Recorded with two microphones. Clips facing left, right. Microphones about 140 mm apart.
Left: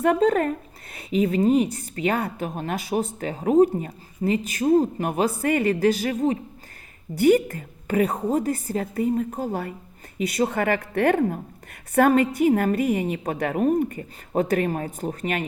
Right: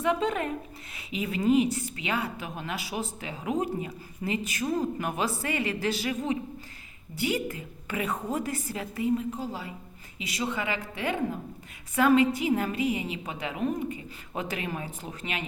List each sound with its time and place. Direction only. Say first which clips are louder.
0.0 s a woman's voice: left 8 dB; 45° left (ahead or behind)